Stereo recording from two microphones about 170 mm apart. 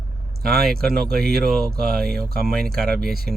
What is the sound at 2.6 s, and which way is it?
Speech, 65° right (ahead or behind).